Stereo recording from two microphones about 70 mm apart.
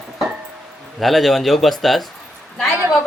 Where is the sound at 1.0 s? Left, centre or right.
Centre.